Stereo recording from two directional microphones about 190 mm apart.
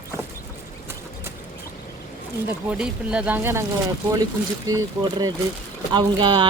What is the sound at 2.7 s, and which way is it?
Speech, 5° right (ahead or behind).